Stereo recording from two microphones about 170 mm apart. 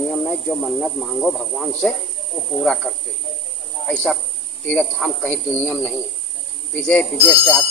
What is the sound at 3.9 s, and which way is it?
Speech, 5° left (ahead or behind).